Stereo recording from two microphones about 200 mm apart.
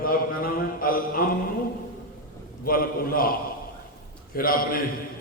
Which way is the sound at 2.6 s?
45° left (ahead or behind).